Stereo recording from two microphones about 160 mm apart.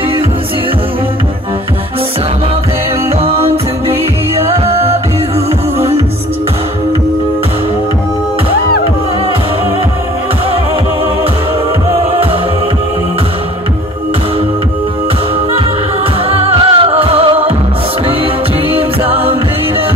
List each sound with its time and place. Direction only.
4.4 s music: 40° right (ahead or behind)
16.3 s music: 35° right (ahead or behind)